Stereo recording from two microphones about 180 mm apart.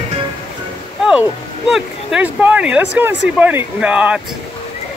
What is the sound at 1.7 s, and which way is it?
Speech, 5° right (ahead or behind).